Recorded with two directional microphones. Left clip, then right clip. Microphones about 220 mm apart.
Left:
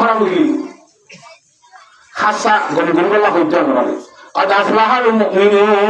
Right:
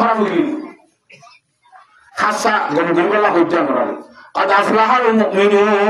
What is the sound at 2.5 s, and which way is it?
A man's voice, 10° right (ahead or behind).